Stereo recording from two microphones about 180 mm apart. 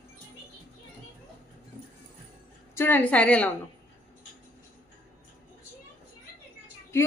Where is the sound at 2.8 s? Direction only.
10° left (ahead or behind).